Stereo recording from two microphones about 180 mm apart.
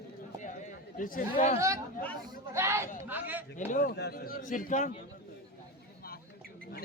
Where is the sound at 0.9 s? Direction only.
50° left (ahead or behind).